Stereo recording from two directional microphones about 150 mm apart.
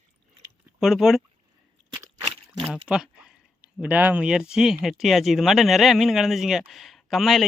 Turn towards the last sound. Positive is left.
turn(degrees=0)  # may be behind; listen again after turning